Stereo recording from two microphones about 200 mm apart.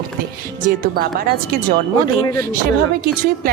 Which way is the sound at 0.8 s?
50° right (ahead or behind).